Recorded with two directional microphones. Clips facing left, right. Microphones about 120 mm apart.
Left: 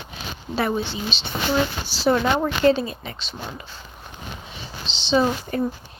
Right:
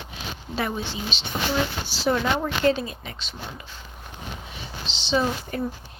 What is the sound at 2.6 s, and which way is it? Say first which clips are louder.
Speech: left 4 dB; 30° left (ahead or behind).